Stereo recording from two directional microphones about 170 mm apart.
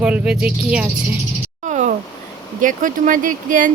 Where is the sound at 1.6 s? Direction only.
45° right (ahead or behind).